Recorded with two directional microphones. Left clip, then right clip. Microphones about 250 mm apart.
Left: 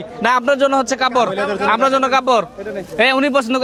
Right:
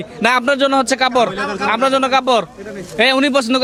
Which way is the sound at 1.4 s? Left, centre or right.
Right.